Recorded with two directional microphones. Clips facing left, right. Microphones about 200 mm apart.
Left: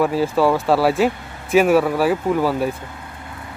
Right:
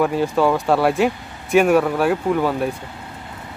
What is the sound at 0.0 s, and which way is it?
Speech, centre (ahead or behind).